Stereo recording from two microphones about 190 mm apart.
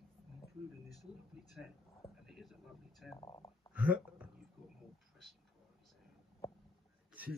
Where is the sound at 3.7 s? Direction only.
5° right (ahead or behind).